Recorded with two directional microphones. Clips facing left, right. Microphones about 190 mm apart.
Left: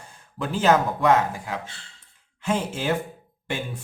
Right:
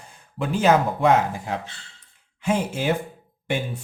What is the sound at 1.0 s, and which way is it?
Speech, 30° right (ahead or behind).